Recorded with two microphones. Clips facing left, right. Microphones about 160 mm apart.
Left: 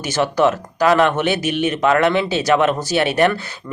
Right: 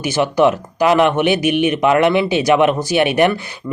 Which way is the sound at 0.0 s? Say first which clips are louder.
Right 2 dB; 10° right (ahead or behind).